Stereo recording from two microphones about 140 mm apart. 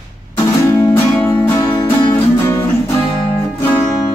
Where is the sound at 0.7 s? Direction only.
15° left (ahead or behind).